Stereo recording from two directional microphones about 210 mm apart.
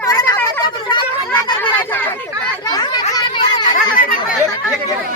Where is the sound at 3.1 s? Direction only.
20° left (ahead or behind).